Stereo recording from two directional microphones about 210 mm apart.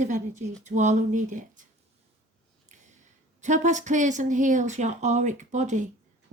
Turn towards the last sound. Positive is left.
turn(degrees=-35)  # may be behind; listen again after turning